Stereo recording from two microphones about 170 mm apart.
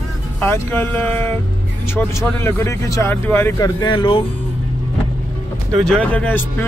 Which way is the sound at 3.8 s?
30° left (ahead or behind).